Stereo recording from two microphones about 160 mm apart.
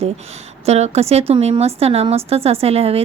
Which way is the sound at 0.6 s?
40° right (ahead or behind).